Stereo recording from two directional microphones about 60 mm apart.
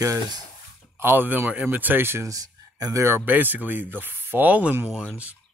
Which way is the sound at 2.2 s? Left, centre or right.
Right.